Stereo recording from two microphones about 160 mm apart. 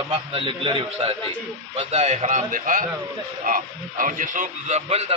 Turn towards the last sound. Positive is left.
turn(degrees=-40)  # may be behind; listen again after turning